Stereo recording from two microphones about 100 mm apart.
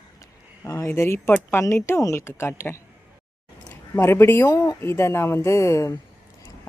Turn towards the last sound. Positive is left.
turn(degrees=30)  # may be behind; listen again after turning